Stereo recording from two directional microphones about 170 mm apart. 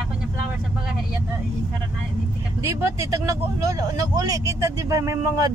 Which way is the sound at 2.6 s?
15° right (ahead or behind).